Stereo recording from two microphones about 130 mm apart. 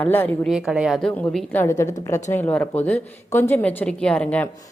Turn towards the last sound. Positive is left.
turn(degrees=10)  # may be behind; listen again after turning